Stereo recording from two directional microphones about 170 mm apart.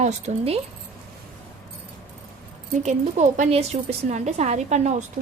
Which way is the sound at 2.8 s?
45° right (ahead or behind).